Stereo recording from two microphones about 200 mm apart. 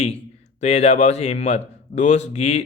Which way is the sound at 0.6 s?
35° left (ahead or behind).